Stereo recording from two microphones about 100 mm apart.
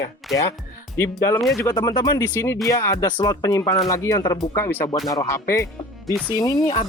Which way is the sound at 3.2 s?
40° left (ahead or behind).